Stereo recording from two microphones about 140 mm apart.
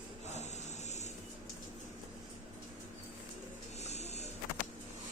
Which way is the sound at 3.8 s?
50° left (ahead or behind).